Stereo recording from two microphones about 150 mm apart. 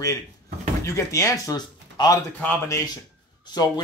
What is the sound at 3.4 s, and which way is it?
Speech, 30° left (ahead or behind).